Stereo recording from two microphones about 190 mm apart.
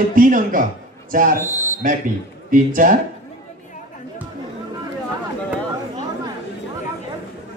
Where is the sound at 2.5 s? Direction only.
45° right (ahead or behind).